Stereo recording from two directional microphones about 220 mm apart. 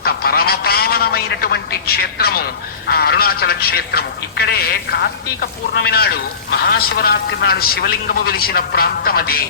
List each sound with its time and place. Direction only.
0.0 s a man's voice: 45° left (ahead or behind)